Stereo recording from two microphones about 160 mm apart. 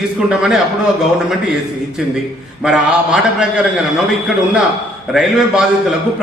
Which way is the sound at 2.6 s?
5° right (ahead or behind).